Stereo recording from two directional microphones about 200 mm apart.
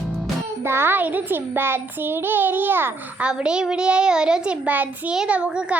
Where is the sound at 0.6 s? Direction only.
10° right (ahead or behind).